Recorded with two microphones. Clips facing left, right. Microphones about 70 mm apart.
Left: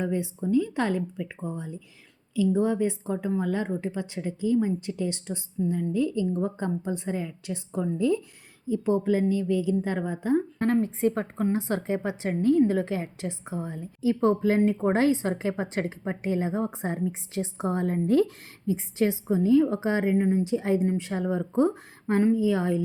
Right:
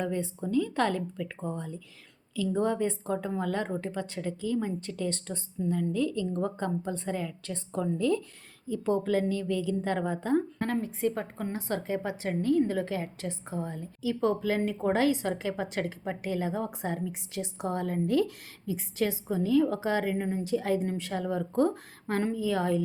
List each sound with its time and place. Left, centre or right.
0.0 s a woman's voice: centre
10.6 s a woman's voice: left; by 13.8 s centre
14.0 s a woman's voice: left